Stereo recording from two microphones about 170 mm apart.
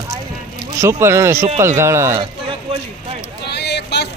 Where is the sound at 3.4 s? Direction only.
80° left.